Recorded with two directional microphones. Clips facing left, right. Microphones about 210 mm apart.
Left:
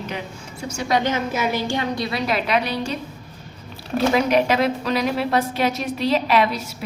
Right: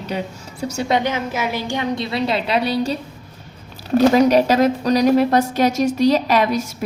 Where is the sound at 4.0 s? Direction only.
40° right (ahead or behind).